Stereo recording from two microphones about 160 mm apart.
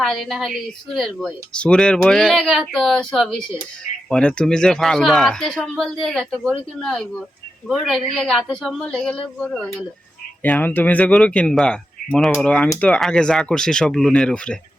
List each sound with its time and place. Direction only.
0.0 s speech: centre (ahead or behind)
12.6 s speech: 20° left (ahead or behind)
12.9 s speech: 5° left (ahead or behind)